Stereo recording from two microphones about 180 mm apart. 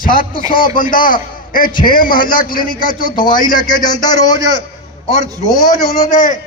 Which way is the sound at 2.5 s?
25° left (ahead or behind).